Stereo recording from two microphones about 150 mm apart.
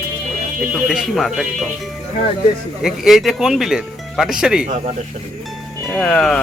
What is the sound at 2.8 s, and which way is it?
Speech, centre (ahead or behind).